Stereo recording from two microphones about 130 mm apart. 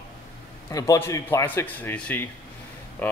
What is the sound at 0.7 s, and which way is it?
A man's voice, 25° left (ahead or behind).